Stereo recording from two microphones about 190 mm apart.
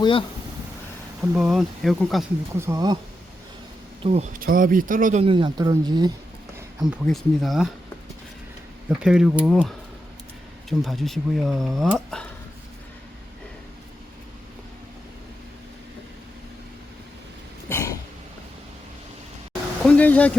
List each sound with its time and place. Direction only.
0.0 s speech: 25° left (ahead or behind)
1.2 s speech: 5° right (ahead or behind)
2.6 s speech: 15° right (ahead or behind)
4.0 s speech: 35° right (ahead or behind)
5.2 s speech: 25° right (ahead or behind)
7.0 s speech: centre (ahead or behind)
8.9 s speech: 5° right (ahead or behind)
17.7 s throat clearing: 15° left (ahead or behind)
19.8 s a sound: 5° left (ahead or behind)